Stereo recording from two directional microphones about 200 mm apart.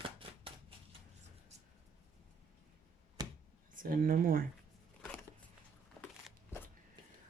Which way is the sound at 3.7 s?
45° right (ahead or behind).